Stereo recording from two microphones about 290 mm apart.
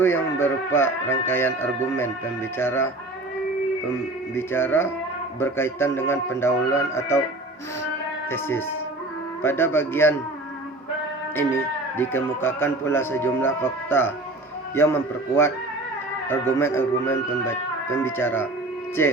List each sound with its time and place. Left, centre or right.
0.0 s speech: centre
4.4 s speech: centre
8.3 s speech: centre
11.3 s speech: centre